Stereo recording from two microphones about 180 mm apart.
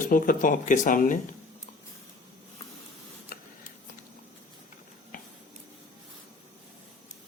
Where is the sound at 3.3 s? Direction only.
50° left (ahead or behind).